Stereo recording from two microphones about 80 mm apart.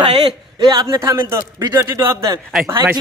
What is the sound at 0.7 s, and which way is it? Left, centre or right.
Speech, right.